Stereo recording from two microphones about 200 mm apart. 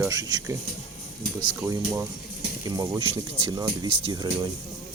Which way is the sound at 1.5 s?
15° right (ahead or behind).